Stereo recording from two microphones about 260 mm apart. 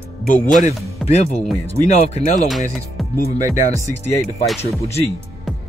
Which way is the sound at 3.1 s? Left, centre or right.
Left.